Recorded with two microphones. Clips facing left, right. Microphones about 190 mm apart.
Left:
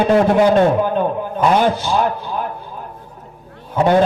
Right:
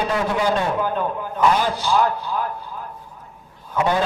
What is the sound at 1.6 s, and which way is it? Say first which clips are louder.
Speech: left 7 dB; 55° left (ahead or behind).